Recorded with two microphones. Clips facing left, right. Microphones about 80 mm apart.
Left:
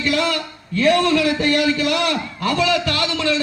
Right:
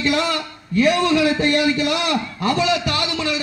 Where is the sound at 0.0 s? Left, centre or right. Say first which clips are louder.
Even; right.